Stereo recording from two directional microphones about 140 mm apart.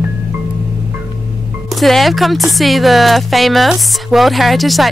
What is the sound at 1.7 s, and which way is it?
Speech, centre (ahead or behind).